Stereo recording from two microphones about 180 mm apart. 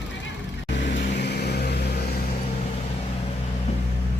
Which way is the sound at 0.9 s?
70° left (ahead or behind).